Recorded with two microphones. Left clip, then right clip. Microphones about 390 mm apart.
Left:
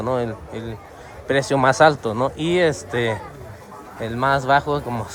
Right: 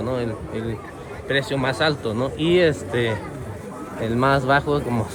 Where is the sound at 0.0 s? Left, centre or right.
Centre.